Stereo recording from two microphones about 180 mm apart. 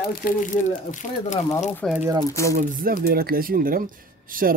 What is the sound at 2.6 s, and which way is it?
Speech, 50° right (ahead or behind).